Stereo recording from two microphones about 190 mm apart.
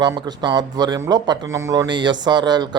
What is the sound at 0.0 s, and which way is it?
Speech, 20° right (ahead or behind).